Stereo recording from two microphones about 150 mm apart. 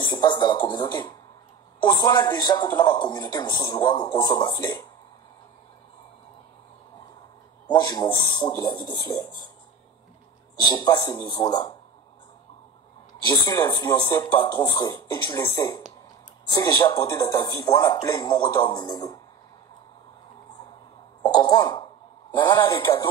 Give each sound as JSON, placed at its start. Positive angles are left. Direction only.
{"t": 0.0, "sound": "a man's voice", "side_deg": 30}
{"t": 7.7, "sound": "a man's voice", "side_deg": 30}
{"t": 10.6, "sound": "a man's voice", "side_deg": 30}
{"t": 13.5, "sound": "a man's voice", "side_deg": 25}
{"t": 21.3, "sound": "a sound", "side_deg": 25}
{"t": 22.4, "sound": "a man's voice", "side_deg": 30}